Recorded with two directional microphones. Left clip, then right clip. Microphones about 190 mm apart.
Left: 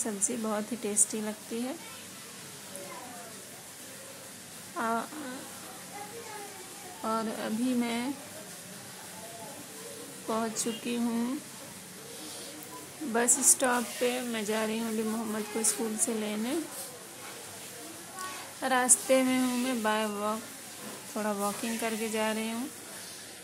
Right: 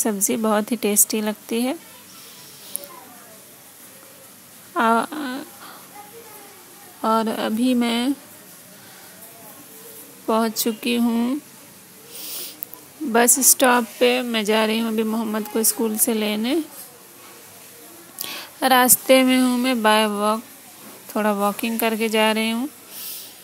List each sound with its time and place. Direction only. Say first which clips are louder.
0.0 s speech: right 12 dB; 45° right (ahead or behind)
4.7 s a sound: right 13 dB; 50° right (ahead or behind)
7.0 s speech: right 12 dB; 45° right (ahead or behind)
10.2 s speech: right 11 dB; 40° right (ahead or behind)
13.1 s speech: right 10 dB; 40° right (ahead or behind)
18.6 s speech: right 11 dB; 45° right (ahead or behind)